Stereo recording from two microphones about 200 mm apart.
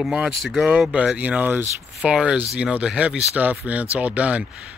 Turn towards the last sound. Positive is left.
turn(degrees=-5)  # may be behind; listen again after turning